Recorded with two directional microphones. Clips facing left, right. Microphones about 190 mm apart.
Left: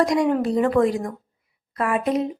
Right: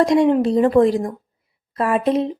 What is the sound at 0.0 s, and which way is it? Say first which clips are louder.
Speech: right 5 dB; 25° right (ahead or behind).